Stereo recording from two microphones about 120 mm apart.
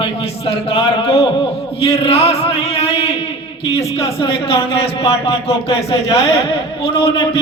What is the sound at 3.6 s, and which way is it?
A man's voice, 55° left (ahead or behind).